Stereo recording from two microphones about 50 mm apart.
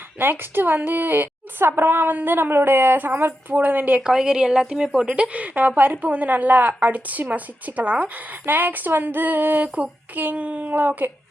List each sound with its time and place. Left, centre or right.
0.2 s a woman's voice: right
4.0 s a woman's voice: centre; by 11.1 s right